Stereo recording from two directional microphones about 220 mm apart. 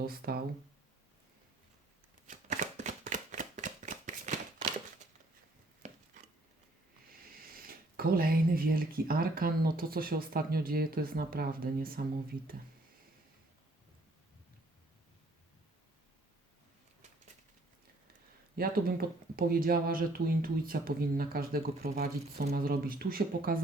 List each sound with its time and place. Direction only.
0.0 s speech: 45° right (ahead or behind)
2.2 s a sound: 35° right (ahead or behind)
5.8 s chopping: 35° right (ahead or behind)
7.3 s speech: 40° right (ahead or behind)
18.5 s speech: 45° right (ahead or behind)